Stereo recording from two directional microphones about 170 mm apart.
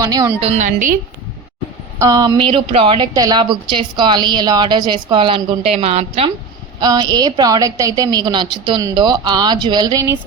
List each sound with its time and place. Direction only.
0.0 s a woman's voice: 20° right (ahead or behind)
0.3 s a woman's voice: 40° right (ahead or behind)
2.0 s a woman's voice: 20° right (ahead or behind)
6.7 s a woman's voice: 25° right (ahead or behind)